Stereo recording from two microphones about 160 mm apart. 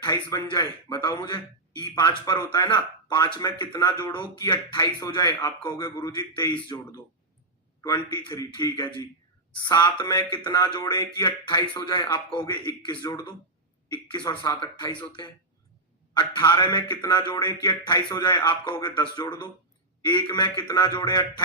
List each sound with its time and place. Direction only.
0.0 s speech: 25° left (ahead or behind)
16.1 s speech: 30° left (ahead or behind)